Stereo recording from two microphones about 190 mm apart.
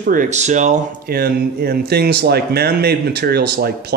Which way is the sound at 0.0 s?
45° right (ahead or behind).